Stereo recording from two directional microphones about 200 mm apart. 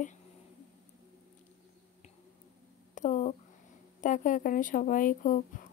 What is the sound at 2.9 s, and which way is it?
Speech, 40° left (ahead or behind).